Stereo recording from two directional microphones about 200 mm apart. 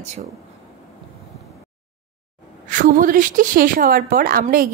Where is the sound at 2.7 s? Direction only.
40° right (ahead or behind).